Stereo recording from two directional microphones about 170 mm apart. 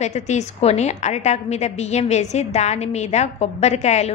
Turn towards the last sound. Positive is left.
turn(degrees=40)  # may be behind; listen again after turning